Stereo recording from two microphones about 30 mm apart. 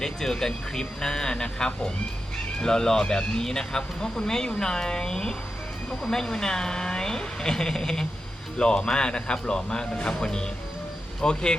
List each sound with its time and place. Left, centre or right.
0.0 s a woman's voice: centre